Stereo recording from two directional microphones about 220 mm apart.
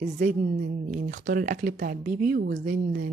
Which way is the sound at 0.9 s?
40° right (ahead or behind).